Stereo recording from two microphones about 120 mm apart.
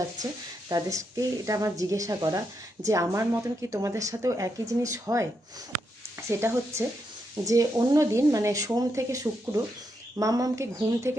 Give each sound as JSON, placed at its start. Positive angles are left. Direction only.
{"t": 0.7, "sound": "a woman's voice", "side_deg": -25}